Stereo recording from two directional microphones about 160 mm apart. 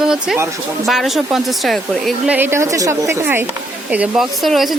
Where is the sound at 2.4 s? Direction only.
15° right (ahead or behind).